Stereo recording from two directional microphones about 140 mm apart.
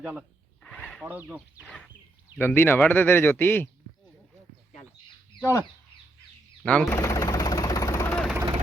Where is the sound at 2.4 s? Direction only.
15° left (ahead or behind).